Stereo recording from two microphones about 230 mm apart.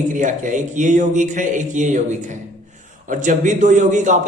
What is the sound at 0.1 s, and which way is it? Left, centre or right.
A man's voice, right.